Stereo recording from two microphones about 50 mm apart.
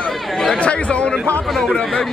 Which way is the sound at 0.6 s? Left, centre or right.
Left.